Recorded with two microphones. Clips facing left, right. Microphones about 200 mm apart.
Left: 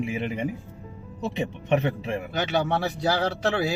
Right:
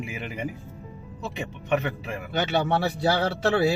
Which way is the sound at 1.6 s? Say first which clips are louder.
Left 2 dB; 25° left (ahead or behind).